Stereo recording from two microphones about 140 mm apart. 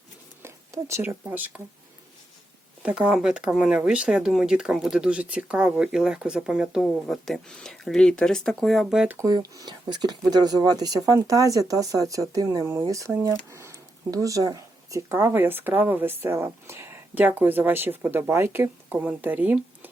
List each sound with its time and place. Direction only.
0.4 s speech: 20° right (ahead or behind)
2.8 s speech: 5° right (ahead or behind)
9.0 s speech: 20° right (ahead or behind)